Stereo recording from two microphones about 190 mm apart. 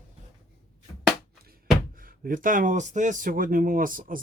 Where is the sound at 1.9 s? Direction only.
50° right (ahead or behind).